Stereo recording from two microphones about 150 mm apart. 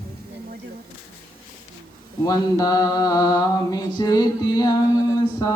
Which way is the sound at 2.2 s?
25° left (ahead or behind).